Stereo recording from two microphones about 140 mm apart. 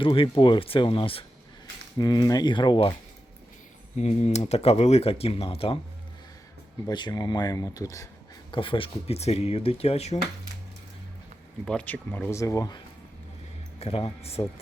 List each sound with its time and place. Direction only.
0.0 s speech: 40° left (ahead or behind)
2.0 s speech: 30° left (ahead or behind)
3.9 s speech: 50° left (ahead or behind)
6.8 s speech: 30° left (ahead or behind)
8.4 s speech: 35° left (ahead or behind)
11.6 s speech: 10° left (ahead or behind); by 12.8 s 25° left (ahead or behind)
13.7 s speech: 45° left (ahead or behind)